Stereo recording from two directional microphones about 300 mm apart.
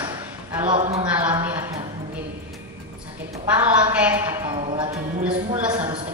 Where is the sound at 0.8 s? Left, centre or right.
Right.